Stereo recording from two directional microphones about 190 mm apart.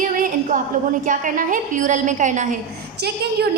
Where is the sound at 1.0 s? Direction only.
45° right (ahead or behind).